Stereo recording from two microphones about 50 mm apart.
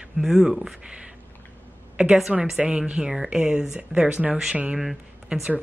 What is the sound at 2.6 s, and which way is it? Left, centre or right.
Speech, right.